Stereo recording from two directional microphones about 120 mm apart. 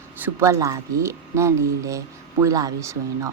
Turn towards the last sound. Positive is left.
turn(degrees=-25)  # may be behind; listen again after turning